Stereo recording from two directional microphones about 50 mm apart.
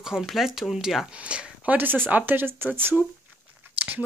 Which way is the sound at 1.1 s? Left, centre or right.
Right.